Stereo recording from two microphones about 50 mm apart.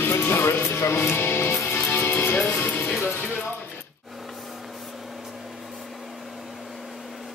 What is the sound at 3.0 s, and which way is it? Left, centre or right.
Music, left.